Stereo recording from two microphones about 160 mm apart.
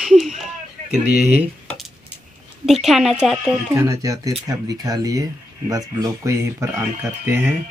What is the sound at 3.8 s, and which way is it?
Speech, 20° right (ahead or behind).